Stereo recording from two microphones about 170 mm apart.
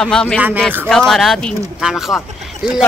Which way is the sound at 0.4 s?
10° right (ahead or behind).